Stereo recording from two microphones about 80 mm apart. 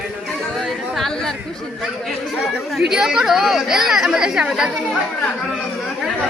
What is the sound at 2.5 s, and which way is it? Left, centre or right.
Speech, centre.